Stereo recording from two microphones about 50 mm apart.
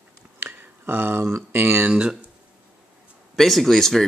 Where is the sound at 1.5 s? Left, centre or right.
Right.